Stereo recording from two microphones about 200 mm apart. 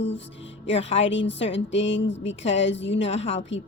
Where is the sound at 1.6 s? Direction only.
65° left (ahead or behind).